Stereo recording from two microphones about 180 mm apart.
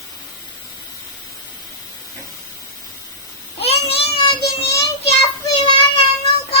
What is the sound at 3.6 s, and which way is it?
Child singing, 35° left (ahead or behind).